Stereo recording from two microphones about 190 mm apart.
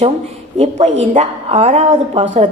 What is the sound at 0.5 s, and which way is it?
A woman's voice, 35° right (ahead or behind).